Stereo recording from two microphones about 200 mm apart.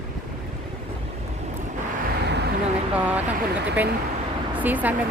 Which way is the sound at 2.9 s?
5° right (ahead or behind).